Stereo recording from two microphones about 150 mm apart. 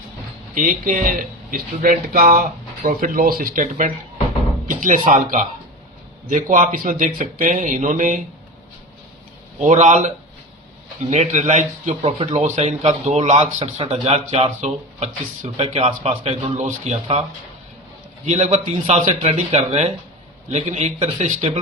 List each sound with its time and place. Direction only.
0.5 s speech: 60° right (ahead or behind)
9.6 s a man's voice: 55° right (ahead or behind)
11.1 s a man's voice: 50° right (ahead or behind)
18.3 s a man's voice: 45° right (ahead or behind)